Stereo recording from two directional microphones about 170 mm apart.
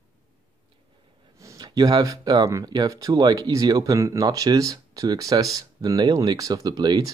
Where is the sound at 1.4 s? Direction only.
20° right (ahead or behind).